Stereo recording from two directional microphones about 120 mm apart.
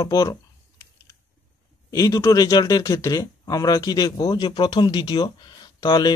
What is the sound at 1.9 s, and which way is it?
A man's voice, 30° left (ahead or behind).